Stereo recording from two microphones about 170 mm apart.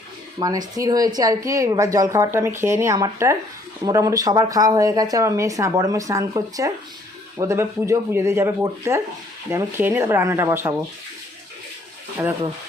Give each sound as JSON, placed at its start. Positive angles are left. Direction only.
{"t": 0.3, "sound": "speech", "side_deg": -20}